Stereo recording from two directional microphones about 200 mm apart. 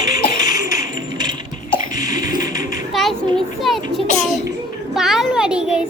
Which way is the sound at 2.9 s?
Centre (ahead or behind).